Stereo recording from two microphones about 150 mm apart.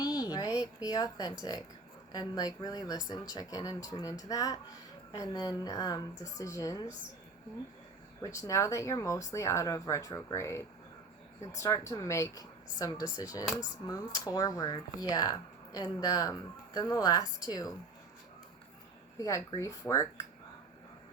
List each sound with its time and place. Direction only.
0.0 s a sound: 25° left (ahead or behind)
2.1 s speech: 25° left (ahead or behind)
8.4 s speech: 20° left (ahead or behind)
19.2 s speech: 20° left (ahead or behind)